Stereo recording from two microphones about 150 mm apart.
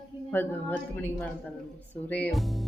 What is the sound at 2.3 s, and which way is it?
Speech, centre (ahead or behind).